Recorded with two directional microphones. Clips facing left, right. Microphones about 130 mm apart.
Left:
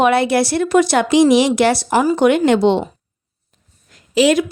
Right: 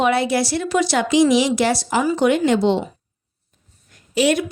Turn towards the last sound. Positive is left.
turn(degrees=90)